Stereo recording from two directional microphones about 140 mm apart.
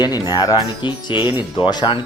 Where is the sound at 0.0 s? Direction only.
30° left (ahead or behind).